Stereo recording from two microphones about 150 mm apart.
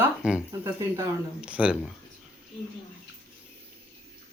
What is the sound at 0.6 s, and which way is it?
Speech, 20° right (ahead or behind).